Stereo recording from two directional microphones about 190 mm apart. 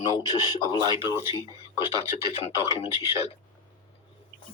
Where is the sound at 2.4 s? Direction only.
30° left (ahead or behind).